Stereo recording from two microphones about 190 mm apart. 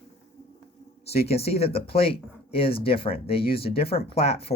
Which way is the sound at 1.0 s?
35° left (ahead or behind).